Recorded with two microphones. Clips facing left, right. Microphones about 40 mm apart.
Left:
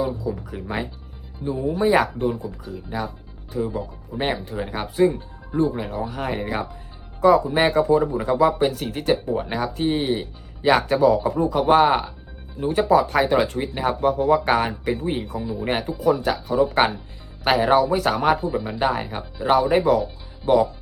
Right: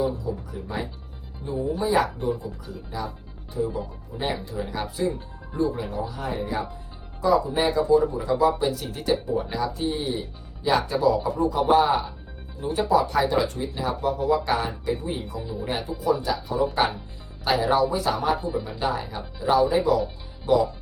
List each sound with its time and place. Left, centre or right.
0.0 s speech: left
2.9 s speech: left
3.5 s speech: left
4.5 s speech: left
13.7 s speech: left
18.8 s speech: left